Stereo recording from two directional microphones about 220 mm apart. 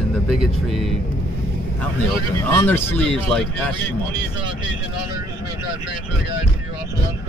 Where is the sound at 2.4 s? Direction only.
10° left (ahead or behind).